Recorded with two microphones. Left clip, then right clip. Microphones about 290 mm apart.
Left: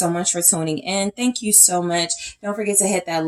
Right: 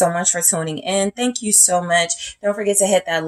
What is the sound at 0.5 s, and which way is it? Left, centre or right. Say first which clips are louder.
Speech: right 2 dB; right.